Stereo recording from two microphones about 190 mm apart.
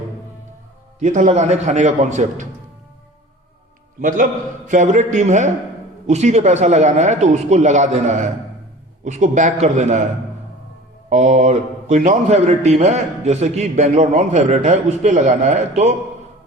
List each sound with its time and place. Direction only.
0.9 s a man's voice: 40° right (ahead or behind)
4.0 s a man's voice: 45° right (ahead or behind)
11.1 s a man's voice: 40° right (ahead or behind)